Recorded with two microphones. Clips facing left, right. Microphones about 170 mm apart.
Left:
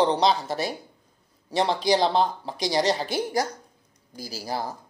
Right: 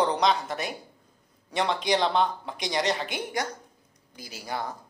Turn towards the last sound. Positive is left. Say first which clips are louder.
# left 3 dB
turn(degrees=35)  # may be behind; listen again after turning